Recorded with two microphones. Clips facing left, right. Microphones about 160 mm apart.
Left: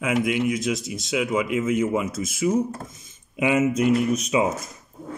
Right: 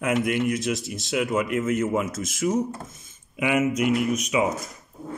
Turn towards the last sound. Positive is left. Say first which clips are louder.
# left 2 dB
turn(degrees=30)  # may be behind; listen again after turning